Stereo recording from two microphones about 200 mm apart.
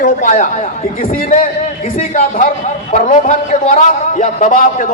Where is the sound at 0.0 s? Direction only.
40° left (ahead or behind).